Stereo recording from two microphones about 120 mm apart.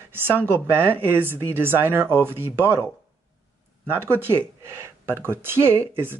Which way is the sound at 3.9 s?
20° right (ahead or behind).